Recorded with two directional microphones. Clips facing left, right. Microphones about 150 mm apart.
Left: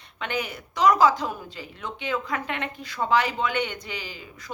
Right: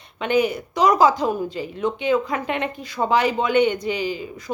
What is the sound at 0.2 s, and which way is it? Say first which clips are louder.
A woman's voice: right 11 dB; 15° right (ahead or behind).